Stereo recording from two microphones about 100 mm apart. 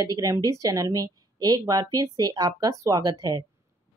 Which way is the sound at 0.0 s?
35° right (ahead or behind).